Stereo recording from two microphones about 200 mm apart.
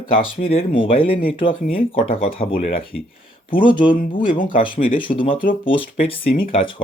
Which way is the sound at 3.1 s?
25° left (ahead or behind).